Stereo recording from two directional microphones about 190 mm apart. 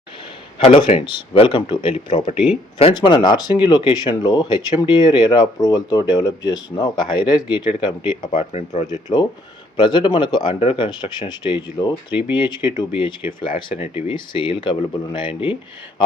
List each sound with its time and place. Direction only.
0.6 s speech: 30° left (ahead or behind)
8.3 s speech: 40° left (ahead or behind)
8.9 s speech: 20° left (ahead or behind)
12.6 s speech: 15° right (ahead or behind)
13.6 s speech: 25° left (ahead or behind)